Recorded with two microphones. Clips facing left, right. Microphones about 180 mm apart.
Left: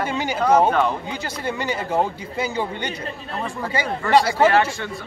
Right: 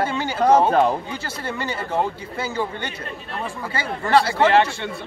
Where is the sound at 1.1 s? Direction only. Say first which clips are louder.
Left 2 dB; 15° left (ahead or behind).